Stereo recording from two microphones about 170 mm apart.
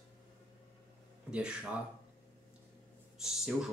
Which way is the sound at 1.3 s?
5° right (ahead or behind).